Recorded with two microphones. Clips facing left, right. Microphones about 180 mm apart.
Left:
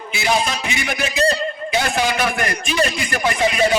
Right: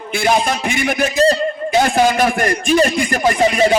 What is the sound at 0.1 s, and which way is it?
A man's voice, 50° right (ahead or behind).